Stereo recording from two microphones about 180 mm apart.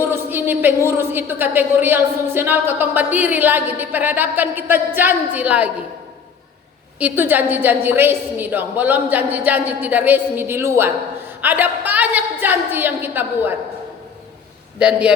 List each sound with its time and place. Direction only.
0.1 s a woman's voice: 10° right (ahead or behind)
7.0 s a woman's voice: 10° right (ahead or behind)
14.8 s a man's voice: 5° right (ahead or behind)